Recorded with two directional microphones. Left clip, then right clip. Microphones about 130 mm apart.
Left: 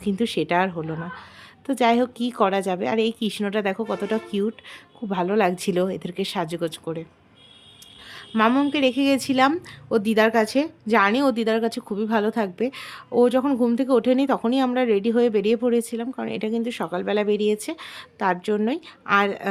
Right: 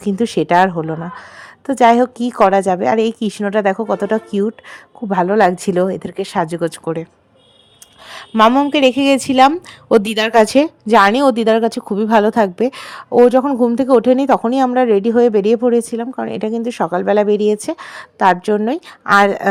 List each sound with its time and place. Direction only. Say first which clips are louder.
0.2 s speech: right 10 dB; 40° right (ahead or behind)
8.3 s speech: right 10 dB; 40° right (ahead or behind)
8.7 s speech: right 8 dB; 55° right (ahead or behind)
9.9 s a woman's voice: right 7 dB; 70° right (ahead or behind); by 18.8 s 40° right (ahead or behind)
19.0 s a woman's voice: right 9 dB; 55° right (ahead or behind)